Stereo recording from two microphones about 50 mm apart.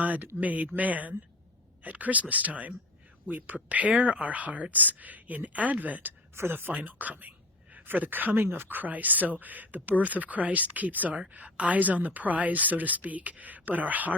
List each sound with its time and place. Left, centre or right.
0.0 s speech: right
6.3 s a woman's voice: right
6.7 s speech: right
8.4 s speech: right